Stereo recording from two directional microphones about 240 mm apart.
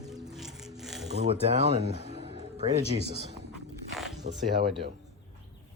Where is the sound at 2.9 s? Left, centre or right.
Right.